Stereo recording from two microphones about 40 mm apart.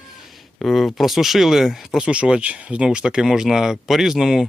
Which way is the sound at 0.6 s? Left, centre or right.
Centre.